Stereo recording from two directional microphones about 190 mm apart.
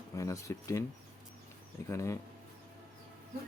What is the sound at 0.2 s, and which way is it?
Speech, 15° left (ahead or behind).